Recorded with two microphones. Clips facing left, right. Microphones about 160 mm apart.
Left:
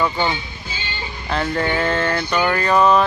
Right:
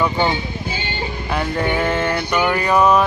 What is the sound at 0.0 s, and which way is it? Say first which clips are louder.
Speech: right 2 dB; 20° right (ahead or behind).